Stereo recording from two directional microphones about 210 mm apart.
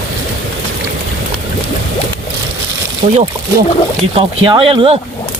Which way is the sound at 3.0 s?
25° right (ahead or behind).